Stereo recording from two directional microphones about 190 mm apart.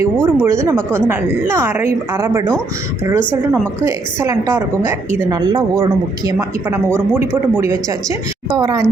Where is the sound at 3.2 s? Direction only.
5° left (ahead or behind).